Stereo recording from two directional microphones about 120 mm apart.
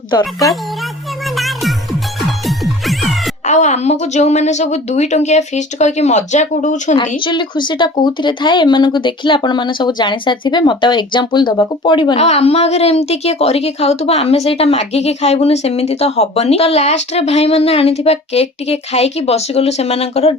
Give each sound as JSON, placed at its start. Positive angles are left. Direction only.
{"t": 0.1, "sound": "speech", "side_deg": 35}
{"t": 1.4, "sound": "music", "side_deg": 0}
{"t": 3.4, "sound": "a woman's voice", "side_deg": 75}
{"t": 7.2, "sound": "speech", "side_deg": 40}
{"t": 12.1, "sound": "a woman's voice", "side_deg": 65}